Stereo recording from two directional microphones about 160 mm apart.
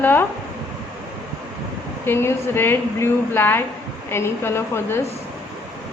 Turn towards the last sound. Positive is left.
turn(degrees=15)  # may be behind; listen again after turning